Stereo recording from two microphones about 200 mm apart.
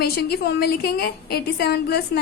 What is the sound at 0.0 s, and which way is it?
A woman's voice, 55° left (ahead or behind).